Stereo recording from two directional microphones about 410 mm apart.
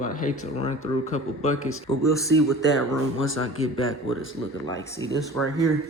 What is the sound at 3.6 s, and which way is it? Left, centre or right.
Speech, left.